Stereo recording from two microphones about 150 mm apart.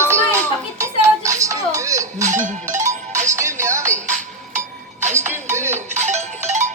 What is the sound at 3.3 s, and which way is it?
Music, 20° right (ahead or behind).